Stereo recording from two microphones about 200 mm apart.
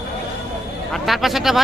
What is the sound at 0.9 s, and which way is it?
Speech, centre (ahead or behind).